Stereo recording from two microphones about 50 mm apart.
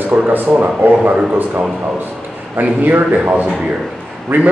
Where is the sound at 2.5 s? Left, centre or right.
Right.